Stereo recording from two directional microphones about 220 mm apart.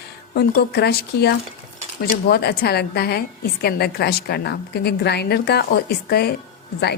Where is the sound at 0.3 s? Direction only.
45° left (ahead or behind).